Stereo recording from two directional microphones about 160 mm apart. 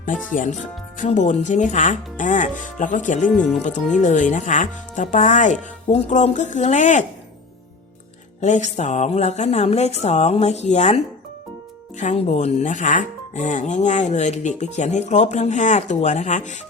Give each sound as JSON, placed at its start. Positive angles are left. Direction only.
{"t": 0.3, "sound": "speech", "side_deg": 50}
{"t": 8.4, "sound": "speech", "side_deg": 50}